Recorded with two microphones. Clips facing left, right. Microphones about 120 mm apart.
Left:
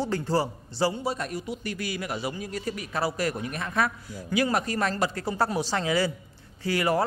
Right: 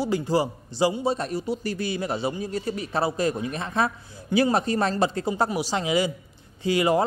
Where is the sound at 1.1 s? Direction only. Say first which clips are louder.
Right 5 dB; 30° right (ahead or behind).